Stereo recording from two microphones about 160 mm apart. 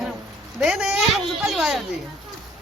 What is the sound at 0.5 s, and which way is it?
Speech, centre (ahead or behind).